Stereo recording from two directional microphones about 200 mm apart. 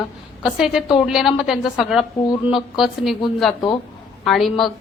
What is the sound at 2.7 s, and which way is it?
Speech, centre (ahead or behind).